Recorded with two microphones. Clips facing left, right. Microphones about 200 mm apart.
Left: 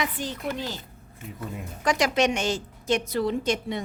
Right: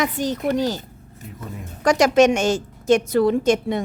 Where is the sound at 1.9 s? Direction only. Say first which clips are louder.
Right 8 dB; 45° right (ahead or behind).